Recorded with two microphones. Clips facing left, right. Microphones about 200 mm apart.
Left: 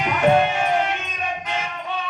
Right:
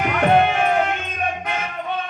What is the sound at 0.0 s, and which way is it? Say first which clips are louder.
Music: right 1 dB; 55° right (ahead or behind).